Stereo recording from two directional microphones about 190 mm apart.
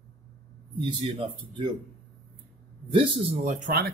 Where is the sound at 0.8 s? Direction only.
25° right (ahead or behind).